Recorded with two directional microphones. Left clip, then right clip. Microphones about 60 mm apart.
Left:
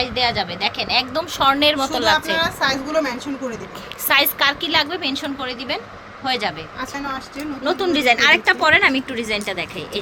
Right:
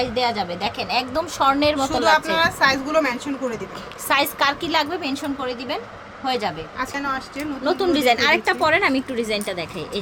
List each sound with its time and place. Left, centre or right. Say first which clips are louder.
0.0 s a woman's voice: left 2 dB; centre
1.8 s a woman's voice: even; right
4.9 s a woman's voice: left 2 dB; centre
6.9 s speech: right 2 dB; centre
7.3 s a woman's voice: left 3 dB; centre